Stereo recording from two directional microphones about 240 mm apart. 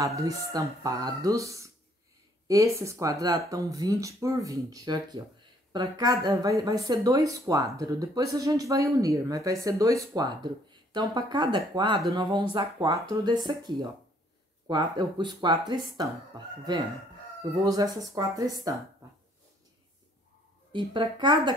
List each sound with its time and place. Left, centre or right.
0.0 s speech: centre
14.7 s speech: centre
20.7 s speech: centre